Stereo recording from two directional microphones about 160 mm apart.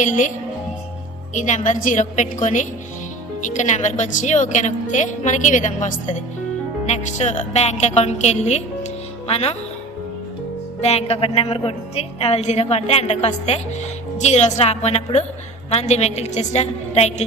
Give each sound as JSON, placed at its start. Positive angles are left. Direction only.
{"t": 0.0, "sound": "a woman's voice", "side_deg": 50}
{"t": 1.3, "sound": "a woman's voice", "side_deg": 50}
{"t": 10.8, "sound": "a woman's voice", "side_deg": 40}